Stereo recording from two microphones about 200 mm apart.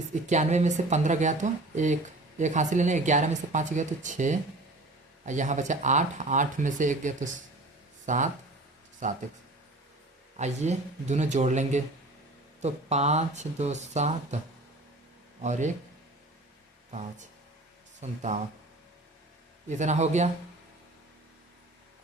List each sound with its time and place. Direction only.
0.1 s speech: 35° right (ahead or behind)
10.3 s speech: 35° right (ahead or behind)
15.4 s speech: 35° right (ahead or behind)
18.0 s speech: 35° right (ahead or behind)
19.6 s speech: 35° right (ahead or behind)